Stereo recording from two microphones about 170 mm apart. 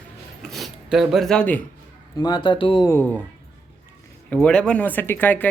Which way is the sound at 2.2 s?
25° left (ahead or behind).